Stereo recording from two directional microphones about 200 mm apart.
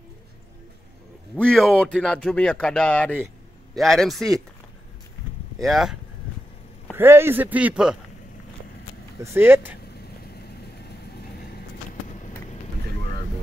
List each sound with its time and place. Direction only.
1.3 s speech: 5° left (ahead or behind)
5.6 s speech: centre (ahead or behind)
7.0 s a man's voice: 10° right (ahead or behind)
9.2 s a man's voice: 10° right (ahead or behind)
10.2 s vehicle: 50° left (ahead or behind)